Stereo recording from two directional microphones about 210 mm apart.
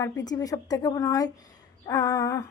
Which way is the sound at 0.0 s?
20° left (ahead or behind).